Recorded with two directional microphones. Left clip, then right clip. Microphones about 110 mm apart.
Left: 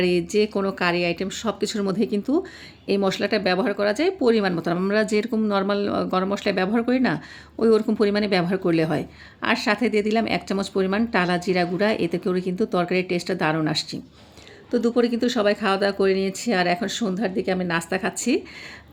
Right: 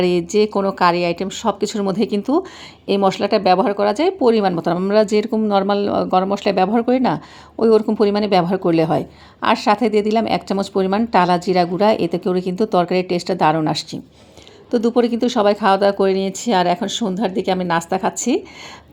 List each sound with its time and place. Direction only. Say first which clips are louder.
0.0 s a woman's voice: right 5 dB; 25° right (ahead or behind)
0.5 s a woman's voice: right 6 dB; 20° left (ahead or behind)
0.8 s a woman's voice: right 7 dB; 20° right (ahead or behind)